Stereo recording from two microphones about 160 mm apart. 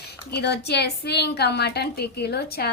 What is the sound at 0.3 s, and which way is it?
A woman's voice, 90° left.